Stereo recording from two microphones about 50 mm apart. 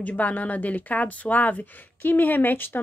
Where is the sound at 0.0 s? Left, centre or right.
Left.